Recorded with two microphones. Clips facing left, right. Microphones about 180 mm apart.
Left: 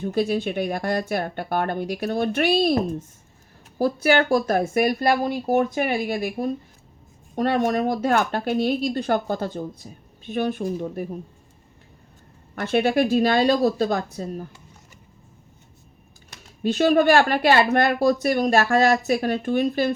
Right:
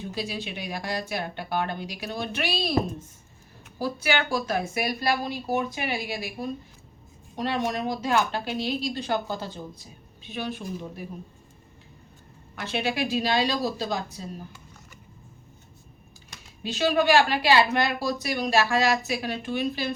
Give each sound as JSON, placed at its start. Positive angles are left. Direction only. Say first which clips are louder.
{"t": 0.0, "sound": "speech", "louder": "left 10 dB", "side_deg": 50}
{"t": 12.5, "sound": "speech", "louder": "left 8 dB", "side_deg": 55}
{"t": 16.6, "sound": "speech", "louder": "left 5 dB", "side_deg": 55}